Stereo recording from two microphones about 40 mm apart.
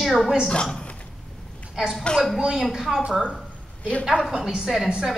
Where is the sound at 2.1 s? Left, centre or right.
Left.